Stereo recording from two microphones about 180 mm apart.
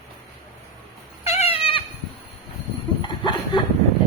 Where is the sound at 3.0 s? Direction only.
25° left (ahead or behind).